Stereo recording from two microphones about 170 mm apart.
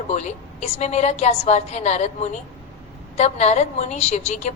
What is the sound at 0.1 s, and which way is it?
A woman's voice, 40° left (ahead or behind).